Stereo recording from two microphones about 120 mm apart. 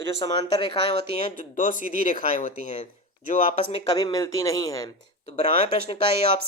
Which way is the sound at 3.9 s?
35° left (ahead or behind).